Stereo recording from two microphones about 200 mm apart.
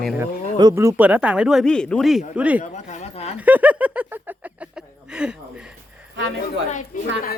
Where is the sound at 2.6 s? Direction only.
35° left (ahead or behind).